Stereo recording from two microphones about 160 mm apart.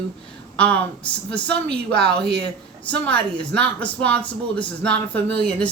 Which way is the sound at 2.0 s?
90° right.